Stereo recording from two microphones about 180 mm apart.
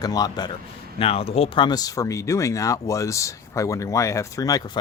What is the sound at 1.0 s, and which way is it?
Speech, 30° left (ahead or behind).